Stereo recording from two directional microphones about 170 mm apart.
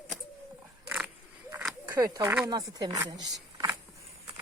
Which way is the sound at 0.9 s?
10° right (ahead or behind).